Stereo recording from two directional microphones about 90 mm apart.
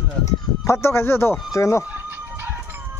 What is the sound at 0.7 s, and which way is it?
Speech, 30° left (ahead or behind).